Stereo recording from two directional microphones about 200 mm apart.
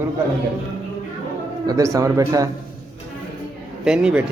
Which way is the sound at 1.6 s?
15° right (ahead or behind).